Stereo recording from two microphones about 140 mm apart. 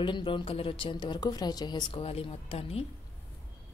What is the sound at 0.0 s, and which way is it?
A woman's voice, 35° left (ahead or behind).